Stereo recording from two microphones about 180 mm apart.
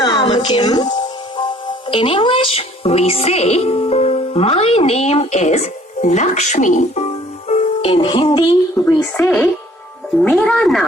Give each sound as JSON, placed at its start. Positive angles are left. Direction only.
{"t": 0.0, "sound": "a woman's voice", "side_deg": 25}
{"t": 8.8, "sound": "speech", "side_deg": 10}